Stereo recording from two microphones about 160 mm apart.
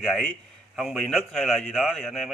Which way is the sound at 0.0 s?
Centre (ahead or behind).